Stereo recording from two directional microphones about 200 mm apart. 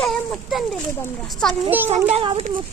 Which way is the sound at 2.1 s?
30° right (ahead or behind).